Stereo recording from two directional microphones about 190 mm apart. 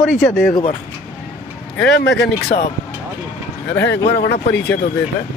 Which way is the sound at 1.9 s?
65° left (ahead or behind).